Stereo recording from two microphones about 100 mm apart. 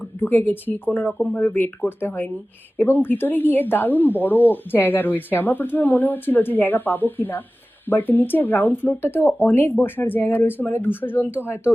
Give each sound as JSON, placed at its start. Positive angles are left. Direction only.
{"t": 0.2, "sound": "a woman's voice", "side_deg": 20}